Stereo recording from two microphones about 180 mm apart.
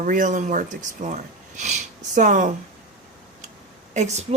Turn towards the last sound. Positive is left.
turn(degrees=-40)  # may be behind; listen again after turning